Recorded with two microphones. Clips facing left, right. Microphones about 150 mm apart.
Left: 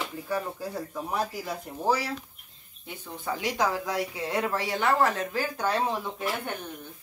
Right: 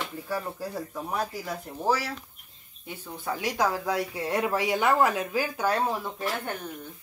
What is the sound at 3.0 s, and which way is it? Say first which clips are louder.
Speech: even; 5° right (ahead or behind).